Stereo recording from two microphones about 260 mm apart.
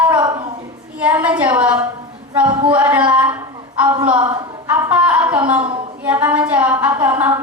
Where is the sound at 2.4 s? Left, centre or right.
Centre.